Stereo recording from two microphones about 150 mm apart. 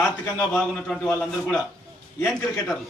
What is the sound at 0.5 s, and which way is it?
A man's voice, 5° left (ahead or behind).